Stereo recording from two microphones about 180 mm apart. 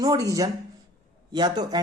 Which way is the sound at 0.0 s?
20° right (ahead or behind).